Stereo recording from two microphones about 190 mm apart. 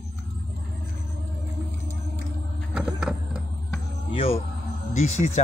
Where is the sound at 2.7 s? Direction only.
5° right (ahead or behind).